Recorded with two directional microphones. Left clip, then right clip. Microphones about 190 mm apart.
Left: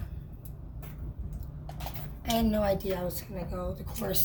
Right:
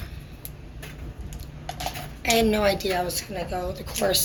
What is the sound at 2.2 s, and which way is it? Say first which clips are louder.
A woman's voice: right 8 dB; 20° left (ahead or behind).